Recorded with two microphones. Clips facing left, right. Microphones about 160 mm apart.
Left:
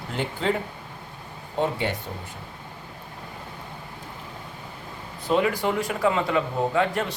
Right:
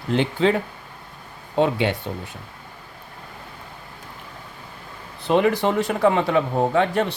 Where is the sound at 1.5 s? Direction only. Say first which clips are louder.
Right 5 dB; 75° right (ahead or behind).